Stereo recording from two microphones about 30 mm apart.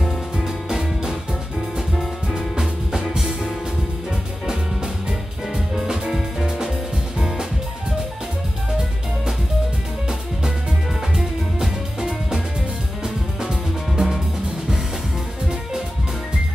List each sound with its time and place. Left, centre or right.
0.7 s music: centre
11.1 s music: centre